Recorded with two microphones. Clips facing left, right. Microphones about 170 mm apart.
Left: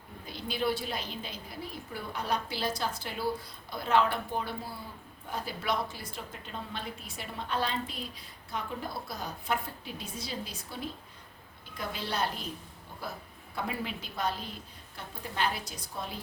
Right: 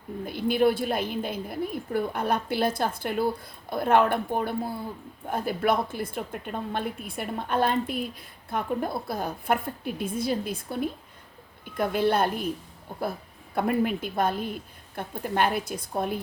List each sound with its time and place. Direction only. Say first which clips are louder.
0.3 s a woman's voice: right 9 dB; 55° right (ahead or behind)